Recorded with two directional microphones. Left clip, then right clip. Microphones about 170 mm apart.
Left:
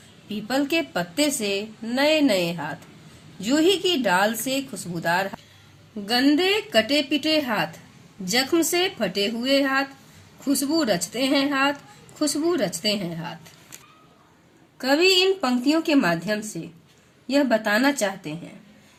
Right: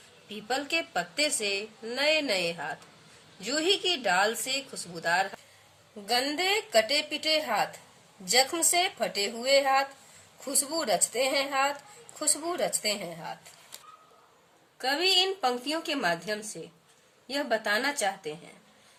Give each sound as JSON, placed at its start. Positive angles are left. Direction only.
{"t": 0.3, "sound": "a woman's voice", "side_deg": 35}
{"t": 14.8, "sound": "a woman's voice", "side_deg": 35}